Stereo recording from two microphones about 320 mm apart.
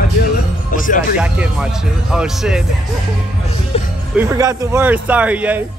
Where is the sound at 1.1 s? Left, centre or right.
Centre.